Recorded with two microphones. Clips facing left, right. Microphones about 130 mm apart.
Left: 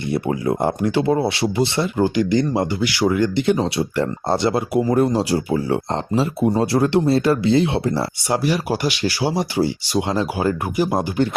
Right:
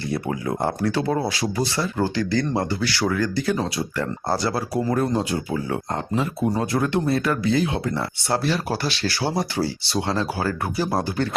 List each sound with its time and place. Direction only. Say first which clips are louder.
0.1 s speech: left 6 dB; 25° left (ahead or behind)
4.9 s speech: left 5 dB; 30° left (ahead or behind)
8.3 s speech: left 3 dB; 15° left (ahead or behind)